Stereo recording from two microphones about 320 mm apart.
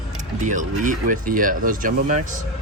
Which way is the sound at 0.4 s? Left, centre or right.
Right.